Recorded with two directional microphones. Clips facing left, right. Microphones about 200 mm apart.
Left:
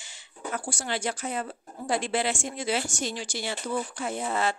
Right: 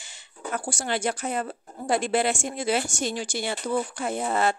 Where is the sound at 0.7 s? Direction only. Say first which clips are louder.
Right 4 dB; 50° right (ahead or behind).